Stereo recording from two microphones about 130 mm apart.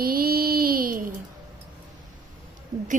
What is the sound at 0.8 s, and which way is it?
Speech, 90° right.